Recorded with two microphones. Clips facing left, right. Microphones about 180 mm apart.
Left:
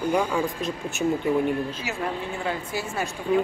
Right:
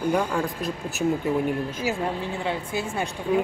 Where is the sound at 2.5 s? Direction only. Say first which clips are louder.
Right 1 dB; 25° right (ahead or behind).